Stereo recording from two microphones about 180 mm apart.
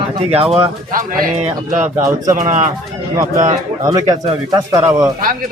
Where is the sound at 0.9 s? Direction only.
50° right (ahead or behind).